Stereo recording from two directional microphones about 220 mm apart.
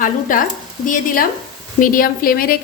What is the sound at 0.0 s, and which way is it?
A woman's voice, 40° left (ahead or behind).